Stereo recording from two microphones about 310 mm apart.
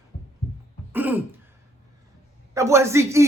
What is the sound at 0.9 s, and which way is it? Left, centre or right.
Throat clearing, centre.